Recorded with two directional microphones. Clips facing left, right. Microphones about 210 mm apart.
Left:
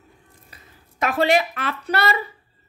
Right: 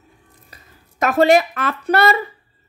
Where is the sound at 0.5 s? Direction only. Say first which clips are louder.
Right 2 dB; 40° right (ahead or behind).